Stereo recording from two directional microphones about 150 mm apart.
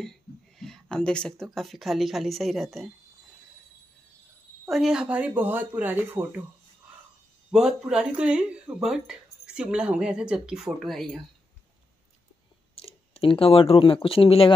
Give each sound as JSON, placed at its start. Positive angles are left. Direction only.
{"t": 0.0, "sound": "speech", "side_deg": 5}
{"t": 4.6, "sound": "speech", "side_deg": -5}
{"t": 7.5, "sound": "speech", "side_deg": -5}
{"t": 12.7, "sound": "speech", "side_deg": 40}